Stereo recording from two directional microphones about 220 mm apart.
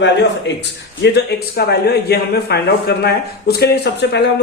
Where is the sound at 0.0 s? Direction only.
55° left (ahead or behind).